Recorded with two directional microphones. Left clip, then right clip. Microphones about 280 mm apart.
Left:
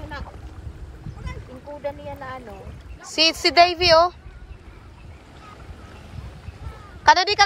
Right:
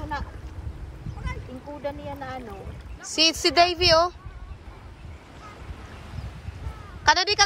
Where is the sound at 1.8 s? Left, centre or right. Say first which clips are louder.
Left 2 dB; right.